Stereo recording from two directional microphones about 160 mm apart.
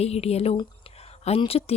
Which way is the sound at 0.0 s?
40° left (ahead or behind).